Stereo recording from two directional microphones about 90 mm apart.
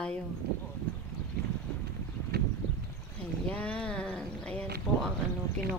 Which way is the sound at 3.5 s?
15° left (ahead or behind).